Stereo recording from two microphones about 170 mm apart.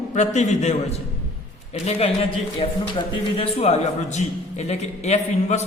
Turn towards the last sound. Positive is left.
turn(degrees=40)  # may be behind; listen again after turning